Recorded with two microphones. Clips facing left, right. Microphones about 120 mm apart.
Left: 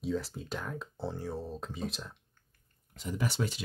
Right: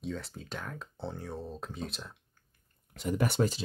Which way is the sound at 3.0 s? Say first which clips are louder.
Right 5 dB; 55° right (ahead or behind).